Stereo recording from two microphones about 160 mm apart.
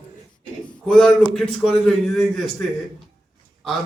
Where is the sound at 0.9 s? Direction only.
5° left (ahead or behind).